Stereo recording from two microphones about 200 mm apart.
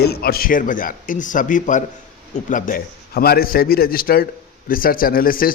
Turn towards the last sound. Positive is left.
turn(degrees=45)  # may be behind; listen again after turning